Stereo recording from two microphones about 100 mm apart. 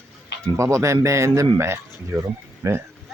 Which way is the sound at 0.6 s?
30° right (ahead or behind).